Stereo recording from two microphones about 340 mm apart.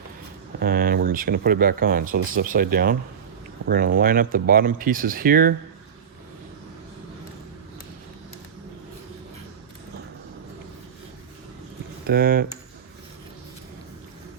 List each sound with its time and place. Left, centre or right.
0.6 s speech: right
12.0 s speech: right